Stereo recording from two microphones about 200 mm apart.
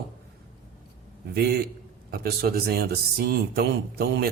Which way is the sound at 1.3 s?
55° right (ahead or behind).